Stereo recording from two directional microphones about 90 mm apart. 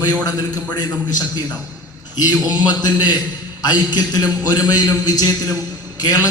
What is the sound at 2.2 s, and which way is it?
A man's voice, 50° left (ahead or behind).